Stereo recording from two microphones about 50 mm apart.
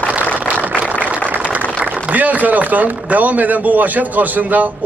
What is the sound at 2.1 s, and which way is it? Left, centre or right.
A man's voice, right.